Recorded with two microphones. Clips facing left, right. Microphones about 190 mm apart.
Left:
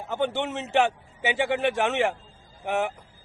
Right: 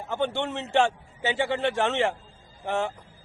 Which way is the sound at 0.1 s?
20° left (ahead or behind).